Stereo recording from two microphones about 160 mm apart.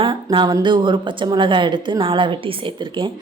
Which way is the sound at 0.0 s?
30° right (ahead or behind).